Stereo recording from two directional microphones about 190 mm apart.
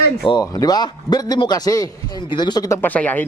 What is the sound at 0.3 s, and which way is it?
A man's voice, 20° left (ahead or behind).